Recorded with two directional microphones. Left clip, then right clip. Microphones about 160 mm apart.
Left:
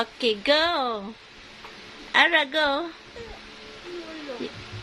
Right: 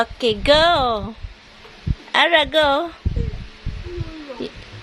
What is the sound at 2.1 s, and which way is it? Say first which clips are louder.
Speech: right 5 dB; 35° right (ahead or behind).